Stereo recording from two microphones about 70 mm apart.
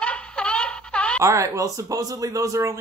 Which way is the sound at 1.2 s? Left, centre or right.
Right.